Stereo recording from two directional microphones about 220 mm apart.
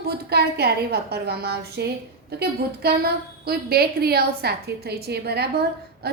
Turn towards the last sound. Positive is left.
turn(degrees=-45)  # may be behind; listen again after turning